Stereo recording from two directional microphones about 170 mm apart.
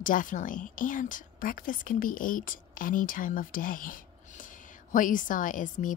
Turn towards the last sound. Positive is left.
turn(degrees=50)  # may be behind; listen again after turning